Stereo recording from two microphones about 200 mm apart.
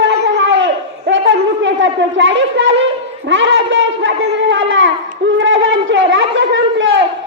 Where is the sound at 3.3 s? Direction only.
70° right (ahead or behind).